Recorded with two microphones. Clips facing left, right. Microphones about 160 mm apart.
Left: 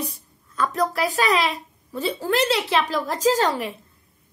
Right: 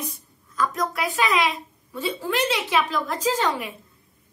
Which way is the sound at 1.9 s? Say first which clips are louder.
Left 3 dB; 35° left (ahead or behind).